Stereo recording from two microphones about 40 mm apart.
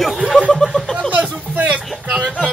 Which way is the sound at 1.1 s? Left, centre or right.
Right.